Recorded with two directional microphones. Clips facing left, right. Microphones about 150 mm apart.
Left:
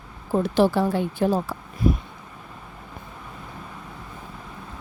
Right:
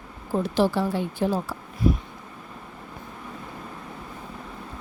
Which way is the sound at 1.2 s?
65° left (ahead or behind).